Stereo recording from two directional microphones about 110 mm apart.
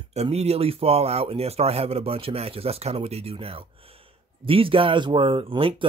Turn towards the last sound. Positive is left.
turn(degrees=-50)  # may be behind; listen again after turning